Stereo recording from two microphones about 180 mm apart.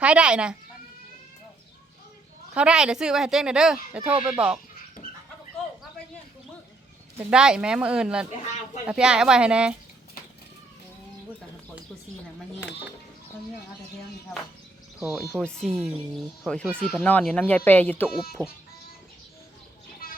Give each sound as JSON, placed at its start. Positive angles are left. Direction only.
{"t": 0.0, "sound": "speech", "side_deg": -5}
{"t": 2.6, "sound": "speech", "side_deg": -5}
{"t": 4.0, "sound": "speech", "side_deg": -30}
{"t": 4.3, "sound": "speech", "side_deg": -5}
{"t": 7.2, "sound": "speech", "side_deg": -5}
{"t": 14.9, "sound": "speech", "side_deg": 0}
{"t": 18.1, "sound": "speech", "side_deg": 0}